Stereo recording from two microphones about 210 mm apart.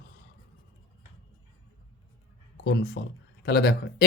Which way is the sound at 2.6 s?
50° left (ahead or behind).